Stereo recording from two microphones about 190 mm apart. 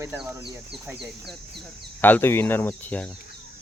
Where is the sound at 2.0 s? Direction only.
10° left (ahead or behind).